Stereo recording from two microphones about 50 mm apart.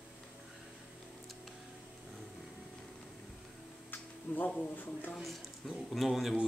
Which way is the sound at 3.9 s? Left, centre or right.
Left.